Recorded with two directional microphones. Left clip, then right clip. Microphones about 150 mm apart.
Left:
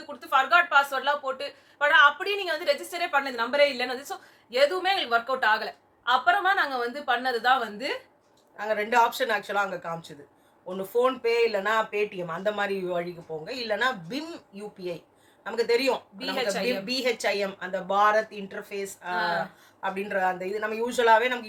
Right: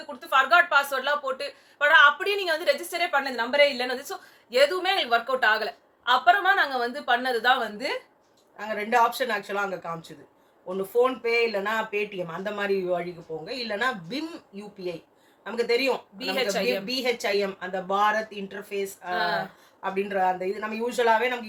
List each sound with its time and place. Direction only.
0.2 s a woman's voice: 10° right (ahead or behind)
8.5 s speech: 25° left (ahead or behind)
15.4 s speech: 25° left (ahead or behind)
16.1 s a woman's voice: 15° right (ahead or behind)
16.6 s speech: 25° left (ahead or behind)
19.1 s a woman's voice: 15° right (ahead or behind)
19.8 s speech: 25° left (ahead or behind)